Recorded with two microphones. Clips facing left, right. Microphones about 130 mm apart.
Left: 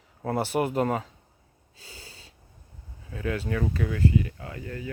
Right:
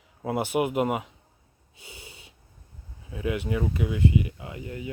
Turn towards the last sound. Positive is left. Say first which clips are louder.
# even
turn(degrees=-20)  # may be behind; listen again after turning